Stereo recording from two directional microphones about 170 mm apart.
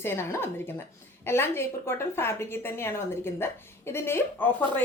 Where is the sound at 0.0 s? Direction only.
15° left (ahead or behind).